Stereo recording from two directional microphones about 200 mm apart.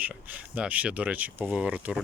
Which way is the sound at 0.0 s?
10° right (ahead or behind).